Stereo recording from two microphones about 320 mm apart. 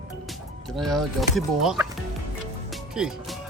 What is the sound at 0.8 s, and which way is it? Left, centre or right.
Speech, centre.